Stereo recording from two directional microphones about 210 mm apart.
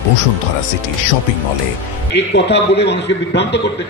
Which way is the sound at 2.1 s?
55° left (ahead or behind).